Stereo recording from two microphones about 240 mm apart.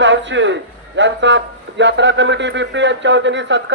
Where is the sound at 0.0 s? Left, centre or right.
Right.